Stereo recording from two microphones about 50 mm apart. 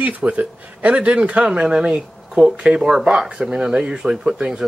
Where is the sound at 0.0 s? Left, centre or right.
Right.